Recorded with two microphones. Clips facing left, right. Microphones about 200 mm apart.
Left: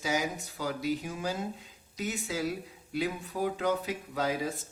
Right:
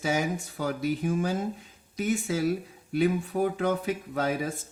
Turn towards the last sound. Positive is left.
turn(degrees=-55)  # may be behind; listen again after turning